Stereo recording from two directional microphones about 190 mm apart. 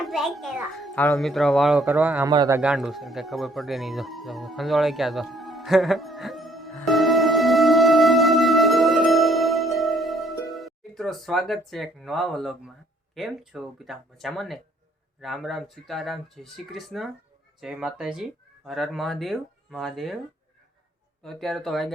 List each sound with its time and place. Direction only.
0.0 s a child's voice: centre (ahead or behind)
2.2 s a man's voice: 20° right (ahead or behind)
2.6 s music: 5° right (ahead or behind)
10.5 s speech: centre (ahead or behind)
21.2 s speech: centre (ahead or behind)